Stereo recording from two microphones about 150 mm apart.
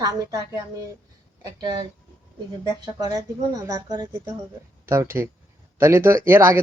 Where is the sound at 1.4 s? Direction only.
25° right (ahead or behind).